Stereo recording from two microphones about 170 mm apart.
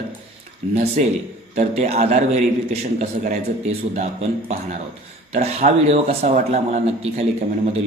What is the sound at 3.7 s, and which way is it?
Speech, 40° right (ahead or behind).